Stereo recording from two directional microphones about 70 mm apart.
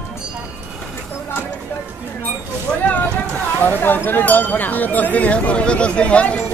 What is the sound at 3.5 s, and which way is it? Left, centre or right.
Speech, left.